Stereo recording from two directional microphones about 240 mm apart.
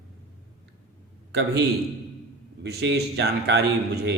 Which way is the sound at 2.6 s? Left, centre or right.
Right.